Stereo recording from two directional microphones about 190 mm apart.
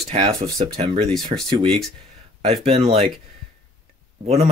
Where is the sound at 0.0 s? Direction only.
30° right (ahead or behind).